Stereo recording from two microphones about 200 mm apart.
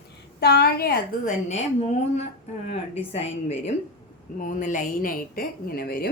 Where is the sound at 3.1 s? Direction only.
30° left (ahead or behind); by 6.1 s 50° left (ahead or behind).